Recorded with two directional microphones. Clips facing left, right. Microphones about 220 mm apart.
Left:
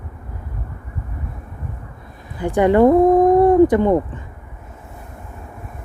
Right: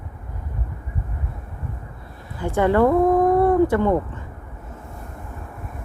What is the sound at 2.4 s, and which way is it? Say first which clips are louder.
Speech: left 4 dB; 15° left (ahead or behind).